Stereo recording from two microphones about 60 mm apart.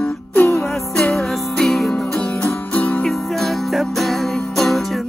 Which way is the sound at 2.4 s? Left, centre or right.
Left.